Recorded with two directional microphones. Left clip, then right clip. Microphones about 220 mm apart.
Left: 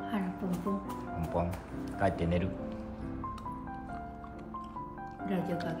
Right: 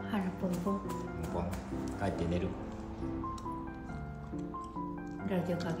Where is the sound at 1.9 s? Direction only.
35° left (ahead or behind).